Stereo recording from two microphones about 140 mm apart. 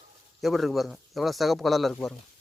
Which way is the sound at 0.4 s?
Centre (ahead or behind).